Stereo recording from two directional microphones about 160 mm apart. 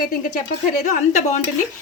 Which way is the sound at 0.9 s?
50° left (ahead or behind).